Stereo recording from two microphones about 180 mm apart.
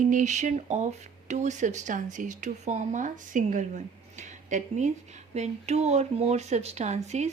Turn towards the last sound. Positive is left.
turn(degrees=-40)  # may be behind; listen again after turning